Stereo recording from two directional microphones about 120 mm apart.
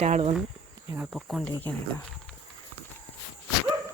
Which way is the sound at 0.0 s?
60° right (ahead or behind).